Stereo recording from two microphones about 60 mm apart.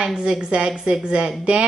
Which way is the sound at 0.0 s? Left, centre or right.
Centre.